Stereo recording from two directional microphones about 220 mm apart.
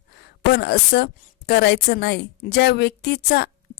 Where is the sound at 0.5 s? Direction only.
45° left (ahead or behind).